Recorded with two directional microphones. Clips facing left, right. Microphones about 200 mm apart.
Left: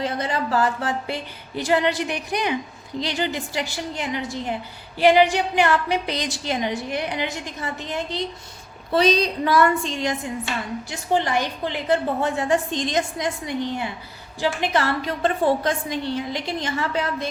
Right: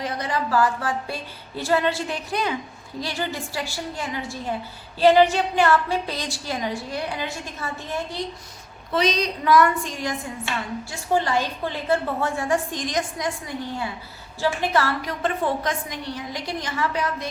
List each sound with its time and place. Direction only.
0.0 s a woman's voice: 25° left (ahead or behind)
8.9 s a woman's voice: 30° left (ahead or behind)